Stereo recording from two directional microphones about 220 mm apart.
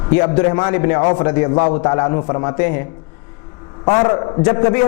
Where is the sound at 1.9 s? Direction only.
20° left (ahead or behind).